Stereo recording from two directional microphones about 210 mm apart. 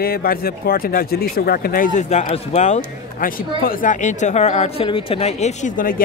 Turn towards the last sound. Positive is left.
turn(degrees=40)  # may be behind; listen again after turning